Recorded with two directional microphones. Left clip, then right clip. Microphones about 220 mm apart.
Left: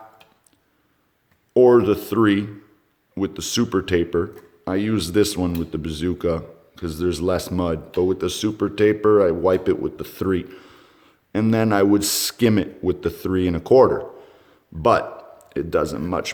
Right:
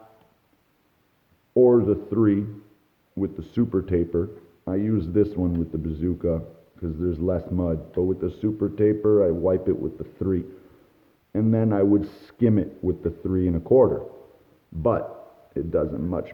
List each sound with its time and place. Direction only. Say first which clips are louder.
1.5 s speech: left 4 dB; 20° left (ahead or behind)